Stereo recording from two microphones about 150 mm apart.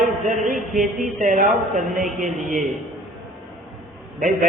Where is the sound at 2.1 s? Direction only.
55° right (ahead or behind).